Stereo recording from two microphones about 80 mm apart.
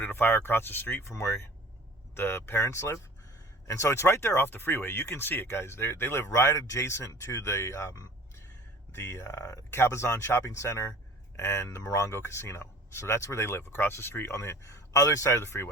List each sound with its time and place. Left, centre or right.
0.0 s speech: left